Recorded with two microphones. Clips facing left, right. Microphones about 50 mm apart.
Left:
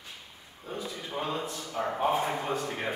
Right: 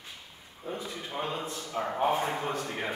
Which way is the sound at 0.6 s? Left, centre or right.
Right.